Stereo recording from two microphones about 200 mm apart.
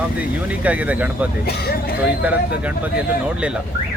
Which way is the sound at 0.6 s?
5° right (ahead or behind).